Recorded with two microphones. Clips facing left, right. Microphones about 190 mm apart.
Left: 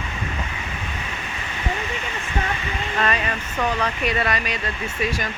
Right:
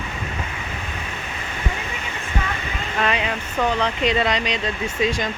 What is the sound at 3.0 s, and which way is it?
Speech, 10° right (ahead or behind).